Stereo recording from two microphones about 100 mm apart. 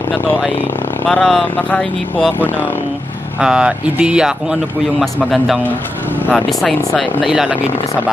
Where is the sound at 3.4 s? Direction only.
10° right (ahead or behind).